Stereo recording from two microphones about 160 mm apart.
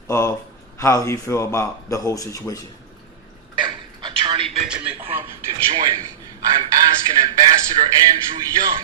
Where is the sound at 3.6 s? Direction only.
30° right (ahead or behind).